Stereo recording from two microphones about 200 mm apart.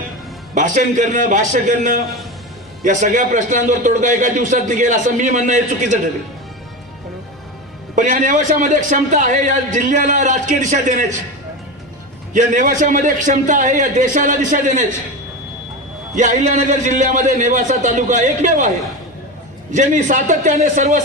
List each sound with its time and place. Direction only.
0.5 s a man's voice: 40° right (ahead or behind)
7.9 s a man's voice: 40° right (ahead or behind)
12.3 s a man's voice: 40° right (ahead or behind)
16.1 s a man's voice: 40° right (ahead or behind)
19.7 s a man's voice: 40° right (ahead or behind)